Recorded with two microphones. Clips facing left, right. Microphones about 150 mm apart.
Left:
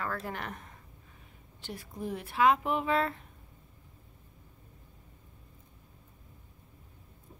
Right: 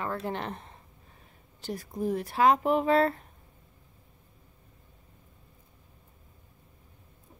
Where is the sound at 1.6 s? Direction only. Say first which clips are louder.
Right 7 dB; 40° right (ahead or behind).